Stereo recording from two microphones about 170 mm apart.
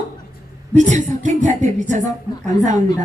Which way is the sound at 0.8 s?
45° right (ahead or behind).